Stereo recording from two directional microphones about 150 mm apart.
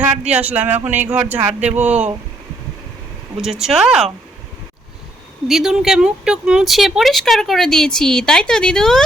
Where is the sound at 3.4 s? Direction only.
5° right (ahead or behind).